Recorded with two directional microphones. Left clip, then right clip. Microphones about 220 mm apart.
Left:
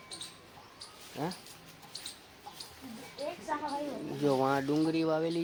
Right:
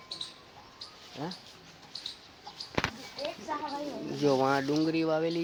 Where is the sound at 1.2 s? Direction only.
10° left (ahead or behind).